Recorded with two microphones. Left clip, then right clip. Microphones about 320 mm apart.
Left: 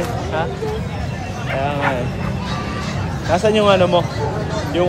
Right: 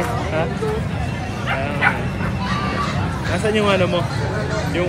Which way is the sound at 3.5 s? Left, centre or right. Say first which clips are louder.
Left 4 dB; centre.